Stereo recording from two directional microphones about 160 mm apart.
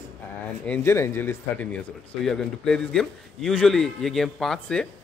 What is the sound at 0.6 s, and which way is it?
A man's voice, 10° left (ahead or behind).